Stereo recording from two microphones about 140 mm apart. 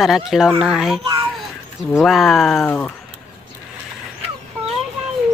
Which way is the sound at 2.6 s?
15° left (ahead or behind).